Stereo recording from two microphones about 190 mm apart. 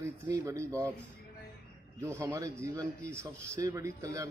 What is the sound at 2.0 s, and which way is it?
A man's voice, 15° right (ahead or behind).